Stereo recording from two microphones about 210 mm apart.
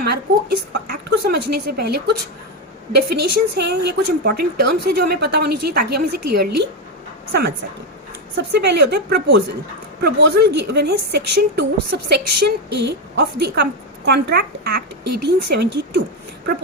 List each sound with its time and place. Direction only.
0.0 s a woman's voice: 50° right (ahead or behind)
8.4 s a woman's voice: 55° right (ahead or behind)